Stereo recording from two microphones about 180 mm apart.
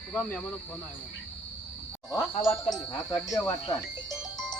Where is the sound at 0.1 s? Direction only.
5° left (ahead or behind).